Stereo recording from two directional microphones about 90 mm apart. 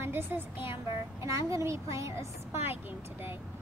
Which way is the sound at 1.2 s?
35° right (ahead or behind).